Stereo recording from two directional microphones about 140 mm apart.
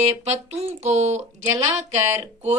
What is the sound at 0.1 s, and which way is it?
Speech, 50° right (ahead or behind).